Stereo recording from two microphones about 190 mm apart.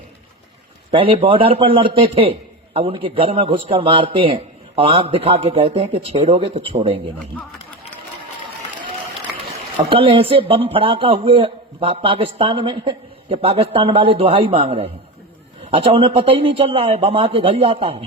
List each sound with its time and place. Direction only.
0.9 s speech: 30° right (ahead or behind)
9.7 s speech: 25° right (ahead or behind)